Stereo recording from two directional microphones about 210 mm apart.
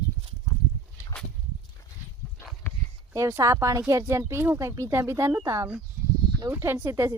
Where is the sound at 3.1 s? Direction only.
15° right (ahead or behind).